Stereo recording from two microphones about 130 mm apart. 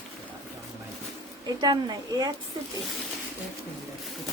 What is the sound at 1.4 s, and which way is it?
Speech, 30° right (ahead or behind).